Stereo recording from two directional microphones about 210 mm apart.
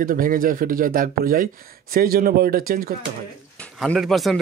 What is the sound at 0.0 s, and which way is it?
Speech, 40° right (ahead or behind).